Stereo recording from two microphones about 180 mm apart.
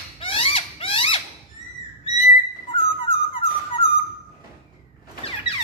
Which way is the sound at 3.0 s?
30° left (ahead or behind).